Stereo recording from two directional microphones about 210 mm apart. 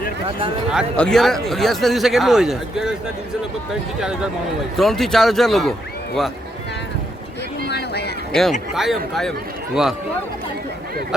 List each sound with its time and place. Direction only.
0.7 s a man's voice: centre (ahead or behind)
4.8 s a man's voice: centre (ahead or behind)
7.7 s a sound: 50° left (ahead or behind)
8.3 s a man's voice: centre (ahead or behind)